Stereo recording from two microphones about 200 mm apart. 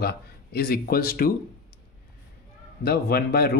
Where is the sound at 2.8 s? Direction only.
50° left (ahead or behind).